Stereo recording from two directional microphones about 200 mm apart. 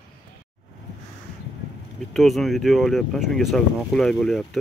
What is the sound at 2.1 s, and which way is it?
Speech, centre (ahead or behind).